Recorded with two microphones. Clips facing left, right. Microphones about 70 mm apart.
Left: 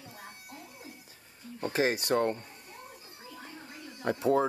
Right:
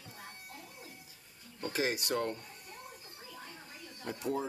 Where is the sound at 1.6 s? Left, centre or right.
Left.